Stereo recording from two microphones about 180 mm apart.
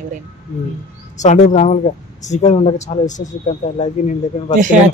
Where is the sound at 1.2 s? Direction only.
40° left (ahead or behind).